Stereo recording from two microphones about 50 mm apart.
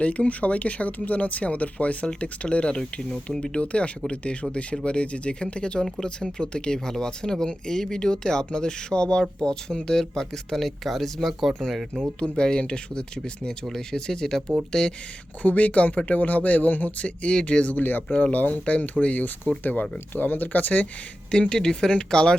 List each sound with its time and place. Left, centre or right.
0.0 s speech: left; by 11.5 s centre
12.2 s speech: centre
15.4 s speech: left
21.4 s speech: centre